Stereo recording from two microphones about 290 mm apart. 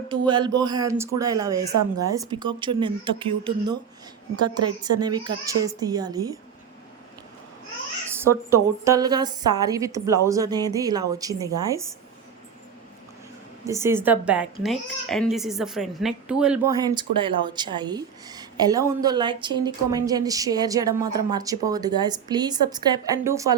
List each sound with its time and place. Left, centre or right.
0.1 s a woman's voice: centre
4.8 s a woman's voice: centre
8.1 s a woman's voice: centre
13.7 s a woman's voice: centre